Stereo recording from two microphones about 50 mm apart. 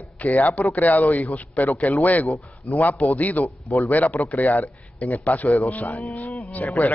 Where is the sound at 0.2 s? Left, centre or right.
Left.